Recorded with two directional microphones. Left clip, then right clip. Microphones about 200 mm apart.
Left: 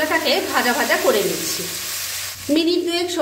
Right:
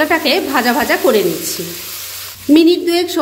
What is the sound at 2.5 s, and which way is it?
Speech, 35° right (ahead or behind).